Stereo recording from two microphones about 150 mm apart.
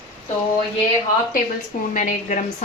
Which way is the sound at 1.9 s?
55° left (ahead or behind).